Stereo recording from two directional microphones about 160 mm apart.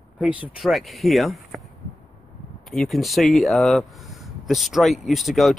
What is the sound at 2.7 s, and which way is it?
Speech, centre (ahead or behind).